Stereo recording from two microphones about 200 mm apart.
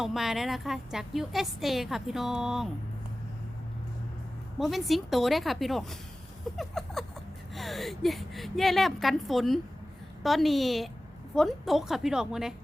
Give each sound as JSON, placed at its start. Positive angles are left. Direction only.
{"t": 0.0, "sound": "a woman's voice", "side_deg": 0}
{"t": 4.6, "sound": "a woman's voice", "side_deg": 0}